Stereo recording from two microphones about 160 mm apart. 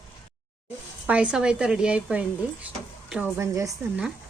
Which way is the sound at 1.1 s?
5° right (ahead or behind).